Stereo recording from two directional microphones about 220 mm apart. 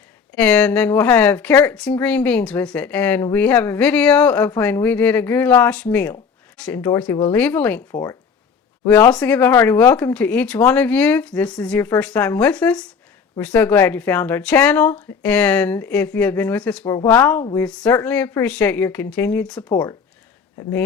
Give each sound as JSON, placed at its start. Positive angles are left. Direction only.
{"t": 0.3, "sound": "speech", "side_deg": 5}
{"t": 8.9, "sound": "speech", "side_deg": 5}
{"t": 19.7, "sound": "speech", "side_deg": 20}